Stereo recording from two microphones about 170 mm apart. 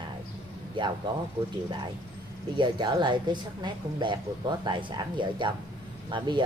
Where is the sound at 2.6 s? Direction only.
25° right (ahead or behind).